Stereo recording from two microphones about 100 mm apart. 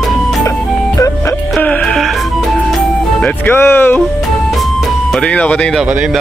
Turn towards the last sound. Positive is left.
turn(degrees=-10)  # may be behind; listen again after turning